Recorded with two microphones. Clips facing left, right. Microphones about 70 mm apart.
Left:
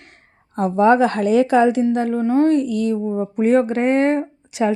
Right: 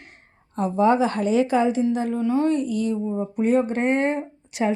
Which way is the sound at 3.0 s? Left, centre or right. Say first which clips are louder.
Left 4 dB; left.